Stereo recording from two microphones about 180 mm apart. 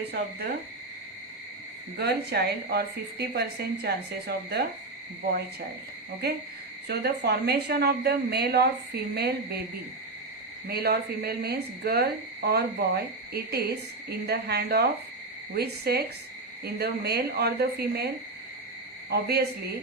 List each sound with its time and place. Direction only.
2.0 s speech: 60° right (ahead or behind)
6.8 s speech: 65° right (ahead or behind)
10.7 s speech: 60° right (ahead or behind)
19.1 s speech: 65° right (ahead or behind)